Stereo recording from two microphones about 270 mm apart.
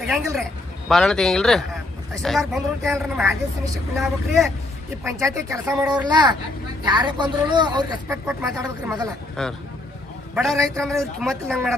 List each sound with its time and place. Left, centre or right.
0.0 s a man's voice: centre
5.0 s speech: centre
9.3 s a man's voice: centre